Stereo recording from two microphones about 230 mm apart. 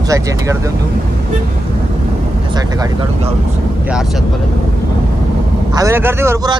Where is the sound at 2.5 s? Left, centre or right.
Centre.